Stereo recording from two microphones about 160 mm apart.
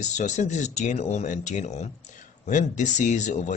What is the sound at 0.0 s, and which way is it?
Speech, 50° left (ahead or behind).